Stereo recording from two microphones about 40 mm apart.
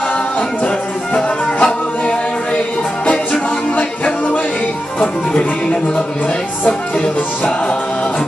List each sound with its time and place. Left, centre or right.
1.1 s music: left
3.7 s music: left
5.0 s music: left